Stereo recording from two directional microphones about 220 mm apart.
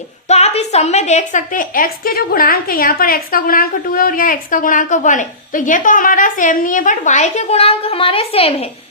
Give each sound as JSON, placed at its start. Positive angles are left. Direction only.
{"t": 0.3, "sound": "a woman's voice", "side_deg": 30}